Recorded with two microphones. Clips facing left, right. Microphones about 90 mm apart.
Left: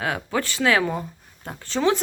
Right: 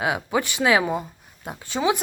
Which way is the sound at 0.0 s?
15° right (ahead or behind).